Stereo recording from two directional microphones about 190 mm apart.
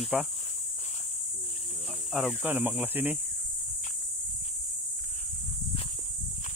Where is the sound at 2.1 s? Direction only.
5° right (ahead or behind).